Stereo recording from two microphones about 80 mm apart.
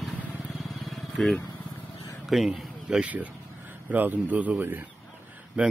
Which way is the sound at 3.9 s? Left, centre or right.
Right.